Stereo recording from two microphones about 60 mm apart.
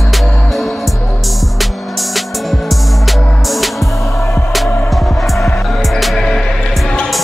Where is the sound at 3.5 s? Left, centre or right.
Centre.